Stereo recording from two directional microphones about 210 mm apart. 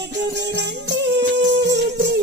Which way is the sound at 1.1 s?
60° right (ahead or behind).